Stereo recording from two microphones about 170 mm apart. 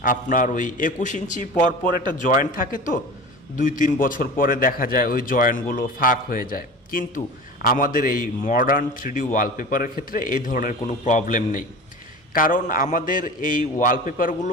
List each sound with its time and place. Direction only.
0.0 s a man's voice: 50° left (ahead or behind)